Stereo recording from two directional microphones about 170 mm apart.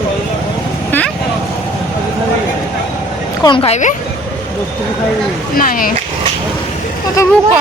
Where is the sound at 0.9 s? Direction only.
10° left (ahead or behind).